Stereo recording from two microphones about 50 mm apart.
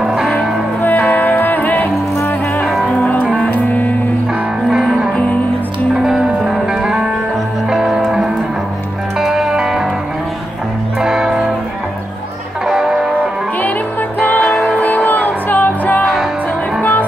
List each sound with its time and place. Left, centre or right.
0.0 s music: centre
0.8 s music: left
6.7 s music: centre
11.0 s music: centre
12.6 s music: centre
14.4 s music: centre
15.0 s music: left